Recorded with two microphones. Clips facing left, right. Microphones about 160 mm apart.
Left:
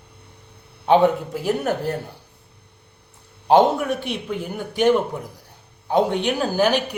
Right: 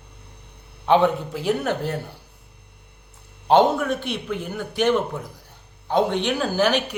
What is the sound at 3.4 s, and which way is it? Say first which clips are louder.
Speech: left 1 dB; 10° left (ahead or behind).